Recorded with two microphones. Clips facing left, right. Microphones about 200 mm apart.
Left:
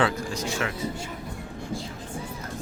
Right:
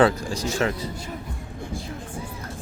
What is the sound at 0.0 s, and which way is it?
Speech, 35° right (ahead or behind).